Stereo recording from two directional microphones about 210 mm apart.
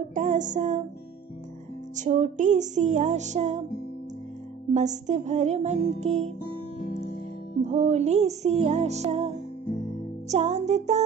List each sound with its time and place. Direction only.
0.1 s music: 35° right (ahead or behind)
2.0 s music: 35° right (ahead or behind)
4.7 s music: 35° right (ahead or behind)
7.6 s music: 30° right (ahead or behind)